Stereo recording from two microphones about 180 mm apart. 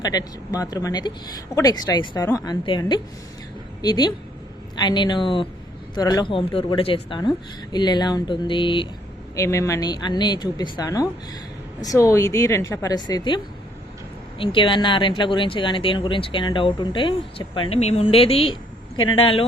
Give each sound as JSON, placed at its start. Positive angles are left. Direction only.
{"t": 0.0, "sound": "speech", "side_deg": 20}
{"t": 9.3, "sound": "a woman's voice", "side_deg": 15}